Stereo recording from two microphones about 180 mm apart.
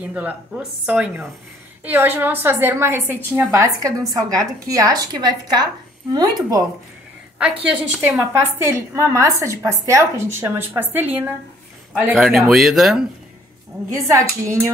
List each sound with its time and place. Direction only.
0.0 s a woman's voice: 10° right (ahead or behind)
7.3 s a woman's voice: 5° right (ahead or behind)
14.0 s a woman's voice: 15° right (ahead or behind)